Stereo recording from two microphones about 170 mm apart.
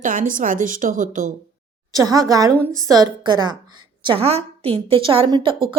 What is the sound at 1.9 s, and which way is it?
A woman's voice, 20° right (ahead or behind).